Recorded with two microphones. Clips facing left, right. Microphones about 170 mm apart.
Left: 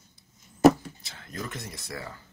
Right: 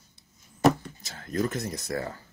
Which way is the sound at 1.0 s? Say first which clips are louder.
Right 10 dB; 40° right (ahead or behind).